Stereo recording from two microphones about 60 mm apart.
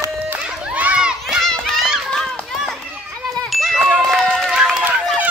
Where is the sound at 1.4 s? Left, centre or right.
Centre.